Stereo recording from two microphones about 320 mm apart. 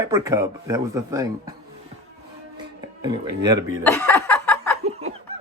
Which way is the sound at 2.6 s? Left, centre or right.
Centre.